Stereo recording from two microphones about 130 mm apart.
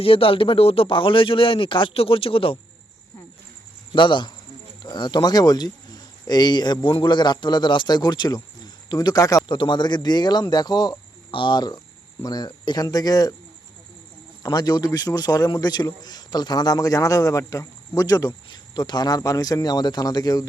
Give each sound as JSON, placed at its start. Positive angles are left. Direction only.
{"t": 0.0, "sound": "speech", "side_deg": 45}
{"t": 3.9, "sound": "a man's voice", "side_deg": 40}
{"t": 14.4, "sound": "a man's voice", "side_deg": 30}